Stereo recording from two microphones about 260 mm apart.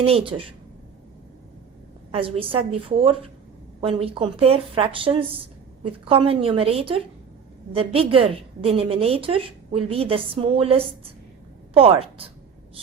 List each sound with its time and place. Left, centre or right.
0.0 s a woman's voice: right
2.1 s a woman's voice: right